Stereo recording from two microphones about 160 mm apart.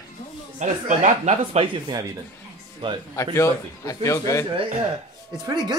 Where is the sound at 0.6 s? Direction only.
50° right (ahead or behind).